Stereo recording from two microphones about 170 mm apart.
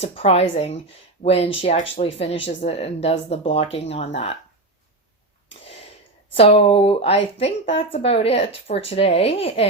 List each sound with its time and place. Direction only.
0.0 s speech: 35° left (ahead or behind)
5.5 s a sound: 35° left (ahead or behind)
6.3 s speech: 35° left (ahead or behind)